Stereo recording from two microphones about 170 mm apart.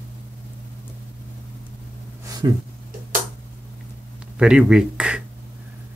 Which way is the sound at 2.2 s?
25° right (ahead or behind).